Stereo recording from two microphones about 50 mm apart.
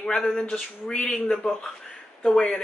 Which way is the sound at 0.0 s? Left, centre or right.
Centre.